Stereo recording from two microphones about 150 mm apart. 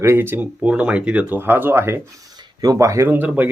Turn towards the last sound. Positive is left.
turn(degrees=-10)  # may be behind; listen again after turning